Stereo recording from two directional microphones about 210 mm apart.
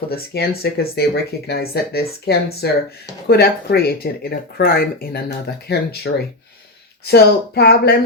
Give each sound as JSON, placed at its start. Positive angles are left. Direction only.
{"t": 0.1, "sound": "speech", "side_deg": 50}